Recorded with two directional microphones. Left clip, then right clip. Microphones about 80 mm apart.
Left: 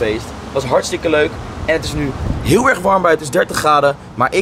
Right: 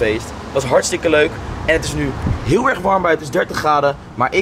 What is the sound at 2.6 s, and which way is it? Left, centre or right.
Speech, left.